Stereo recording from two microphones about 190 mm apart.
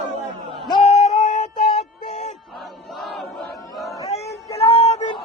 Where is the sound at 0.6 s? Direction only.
25° left (ahead or behind).